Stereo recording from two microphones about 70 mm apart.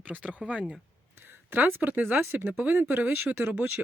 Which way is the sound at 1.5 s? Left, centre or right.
Right.